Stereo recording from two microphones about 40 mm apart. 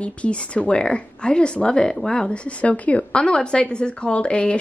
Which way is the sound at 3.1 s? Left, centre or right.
Left.